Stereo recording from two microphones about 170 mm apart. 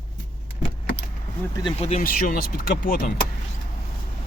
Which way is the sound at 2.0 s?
55° left (ahead or behind).